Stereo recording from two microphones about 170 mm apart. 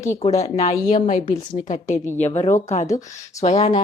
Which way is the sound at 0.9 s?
50° left (ahead or behind).